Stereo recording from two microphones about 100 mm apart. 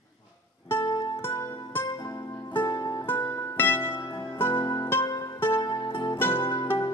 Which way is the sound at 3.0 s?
25° left (ahead or behind).